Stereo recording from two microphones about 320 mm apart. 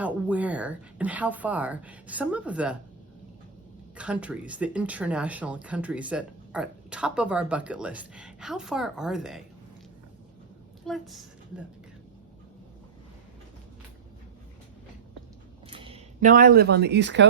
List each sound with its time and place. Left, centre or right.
0.0 s speech: centre
3.9 s speech: centre
10.8 s a woman's voice: centre
15.7 s speech: centre; by 17.2 s right